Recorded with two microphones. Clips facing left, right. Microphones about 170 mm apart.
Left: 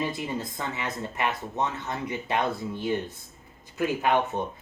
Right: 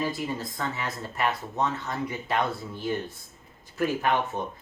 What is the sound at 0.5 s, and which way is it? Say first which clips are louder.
Speech: even; 20° left (ahead or behind).